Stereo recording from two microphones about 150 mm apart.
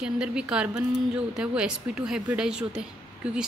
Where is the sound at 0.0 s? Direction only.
5° right (ahead or behind).